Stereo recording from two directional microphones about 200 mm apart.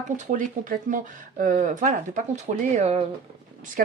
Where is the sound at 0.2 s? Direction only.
40° right (ahead or behind).